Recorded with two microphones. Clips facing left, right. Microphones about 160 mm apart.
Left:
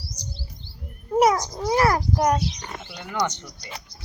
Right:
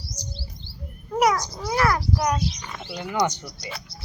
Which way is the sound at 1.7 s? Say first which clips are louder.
Left 2 dB; 35° left (ahead or behind).